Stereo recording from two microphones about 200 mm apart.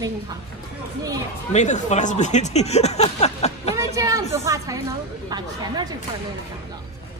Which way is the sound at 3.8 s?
15° right (ahead or behind).